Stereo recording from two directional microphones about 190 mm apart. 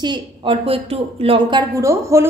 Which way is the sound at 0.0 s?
30° right (ahead or behind).